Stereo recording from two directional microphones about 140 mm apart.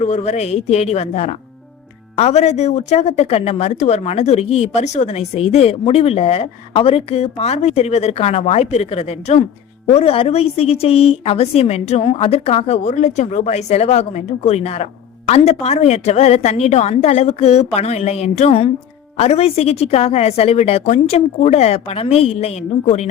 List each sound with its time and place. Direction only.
0.0 s speech: 55° left (ahead or behind)